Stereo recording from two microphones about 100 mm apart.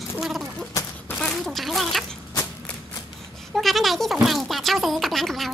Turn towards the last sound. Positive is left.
turn(degrees=0)  # may be behind; listen again after turning